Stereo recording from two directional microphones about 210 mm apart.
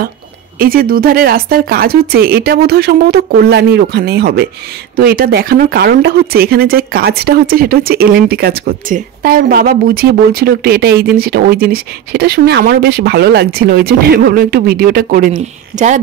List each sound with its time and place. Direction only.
0.6 s speech: 45° right (ahead or behind)